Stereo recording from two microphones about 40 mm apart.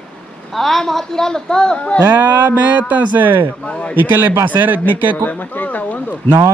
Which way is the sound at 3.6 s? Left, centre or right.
Left.